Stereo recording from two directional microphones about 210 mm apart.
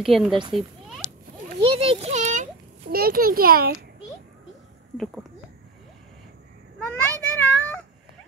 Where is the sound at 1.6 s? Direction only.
25° right (ahead or behind); by 3.8 s 45° right (ahead or behind).